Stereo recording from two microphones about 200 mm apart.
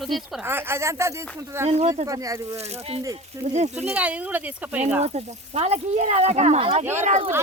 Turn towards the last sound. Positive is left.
turn(degrees=-35)  # may be behind; listen again after turning